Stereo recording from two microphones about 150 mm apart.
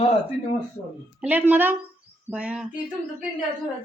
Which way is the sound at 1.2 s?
10° right (ahead or behind).